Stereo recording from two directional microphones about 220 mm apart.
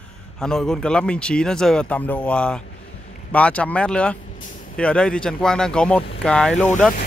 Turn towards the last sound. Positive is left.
turn(degrees=5)  # may be behind; listen again after turning